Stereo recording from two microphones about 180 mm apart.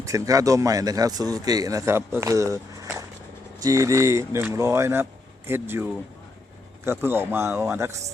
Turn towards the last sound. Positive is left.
turn(degrees=-15)  # may be behind; listen again after turning